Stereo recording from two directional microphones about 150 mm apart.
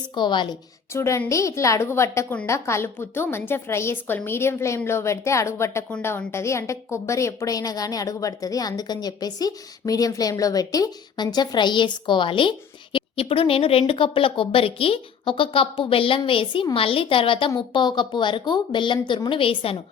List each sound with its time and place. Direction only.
0.1 s a woman's voice: 30° left (ahead or behind)
0.9 s a woman's voice: 20° left (ahead or behind); by 19.7 s 35° left (ahead or behind)